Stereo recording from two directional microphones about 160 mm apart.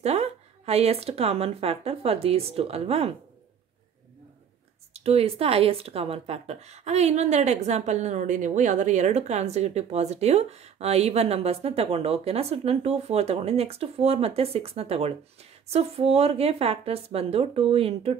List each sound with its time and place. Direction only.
0.0 s speech: 40° right (ahead or behind)
4.9 s speech: 40° right (ahead or behind)